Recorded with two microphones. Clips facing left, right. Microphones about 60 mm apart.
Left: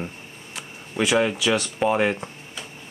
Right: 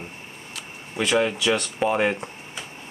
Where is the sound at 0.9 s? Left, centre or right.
Centre.